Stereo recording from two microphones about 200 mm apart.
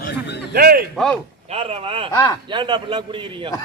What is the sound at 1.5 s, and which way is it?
A man's voice, 30° right (ahead or behind).